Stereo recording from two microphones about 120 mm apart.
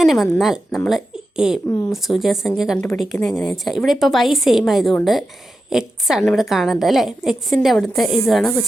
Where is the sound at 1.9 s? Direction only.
Centre (ahead or behind).